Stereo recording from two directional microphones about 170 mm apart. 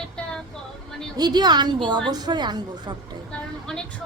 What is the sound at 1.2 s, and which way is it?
A woman's voice, 25° right (ahead or behind).